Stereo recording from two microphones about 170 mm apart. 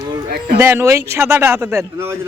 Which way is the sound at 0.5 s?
15° right (ahead or behind).